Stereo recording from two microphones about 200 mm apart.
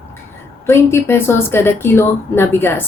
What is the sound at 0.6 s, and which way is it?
Speech, 15° left (ahead or behind).